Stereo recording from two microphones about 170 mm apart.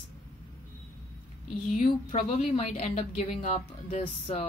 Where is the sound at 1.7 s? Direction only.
40° left (ahead or behind).